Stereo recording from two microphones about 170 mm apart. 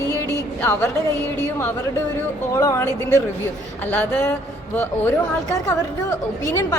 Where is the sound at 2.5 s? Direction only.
20° left (ahead or behind).